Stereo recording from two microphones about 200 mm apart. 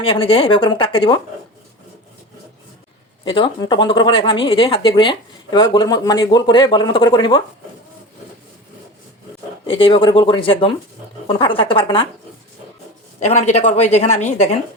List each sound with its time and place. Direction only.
0.0 s speech: 25° left (ahead or behind)
3.2 s speech: 25° left (ahead or behind)
9.6 s speech: 25° left (ahead or behind)
13.1 s a woman's voice: 35° left (ahead or behind)